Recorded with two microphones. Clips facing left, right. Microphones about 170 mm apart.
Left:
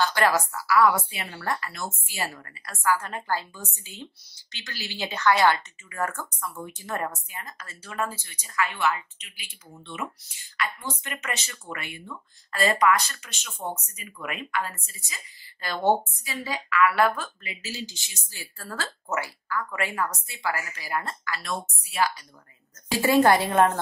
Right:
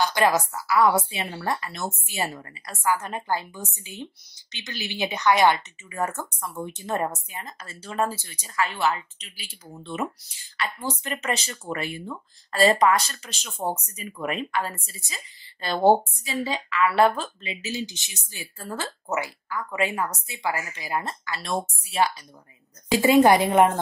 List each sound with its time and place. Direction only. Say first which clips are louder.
0.0 s a woman's voice: right 2 dB; 15° right (ahead or behind)